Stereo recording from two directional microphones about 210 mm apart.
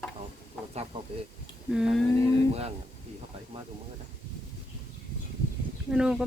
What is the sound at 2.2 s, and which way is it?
Speech, 30° right (ahead or behind).